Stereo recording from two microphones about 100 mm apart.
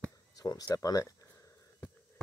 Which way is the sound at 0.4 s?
40° left (ahead or behind).